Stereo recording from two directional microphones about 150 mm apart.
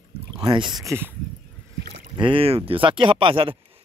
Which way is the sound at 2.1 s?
35° right (ahead or behind).